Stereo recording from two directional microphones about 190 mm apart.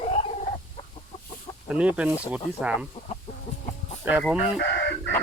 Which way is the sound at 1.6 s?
5° right (ahead or behind).